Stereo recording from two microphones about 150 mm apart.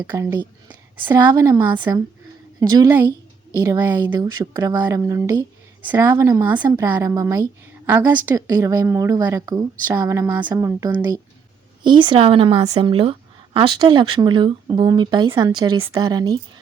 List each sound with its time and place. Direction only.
0.0 s a woman's voice: 20° right (ahead or behind)